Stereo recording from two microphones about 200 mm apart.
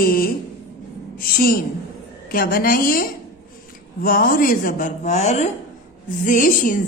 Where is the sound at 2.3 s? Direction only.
45° left (ahead or behind).